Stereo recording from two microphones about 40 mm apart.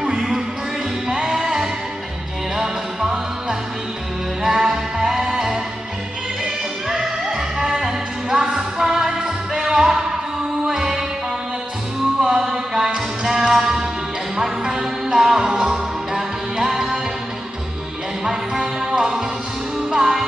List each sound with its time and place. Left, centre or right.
0.0 s music: centre
12.2 s music: centre
13.6 s music: right
14.3 s music: centre
15.4 s music: right
15.7 s music: centre
18.2 s music: centre